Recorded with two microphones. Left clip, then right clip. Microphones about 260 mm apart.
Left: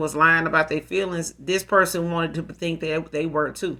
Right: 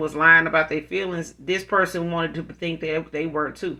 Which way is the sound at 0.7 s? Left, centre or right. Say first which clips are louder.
Left 1 dB; left.